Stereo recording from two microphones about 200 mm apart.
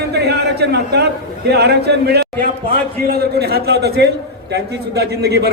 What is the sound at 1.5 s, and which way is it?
A man's voice, 55° right (ahead or behind).